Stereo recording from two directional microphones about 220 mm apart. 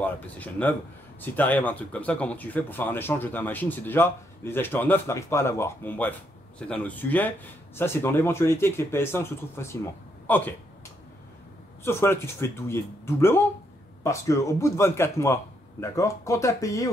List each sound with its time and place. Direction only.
0.0 s speech: 5° left (ahead or behind)
11.8 s speech: 10° left (ahead or behind)